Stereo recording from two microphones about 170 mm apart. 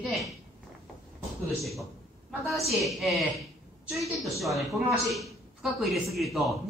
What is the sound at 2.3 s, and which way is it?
Speech, centre (ahead or behind).